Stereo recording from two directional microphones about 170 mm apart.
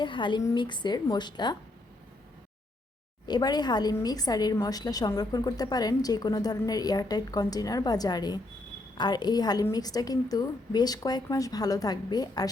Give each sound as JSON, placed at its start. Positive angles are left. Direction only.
{"t": 0.0, "sound": "a woman's voice", "side_deg": 30}
{"t": 3.2, "sound": "a woman's voice", "side_deg": 25}